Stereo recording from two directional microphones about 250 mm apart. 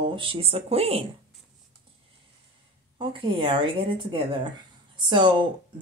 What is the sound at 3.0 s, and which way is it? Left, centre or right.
Speech, right.